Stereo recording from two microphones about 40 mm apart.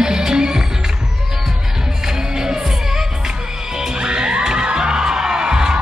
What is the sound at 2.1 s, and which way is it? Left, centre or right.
Music, centre.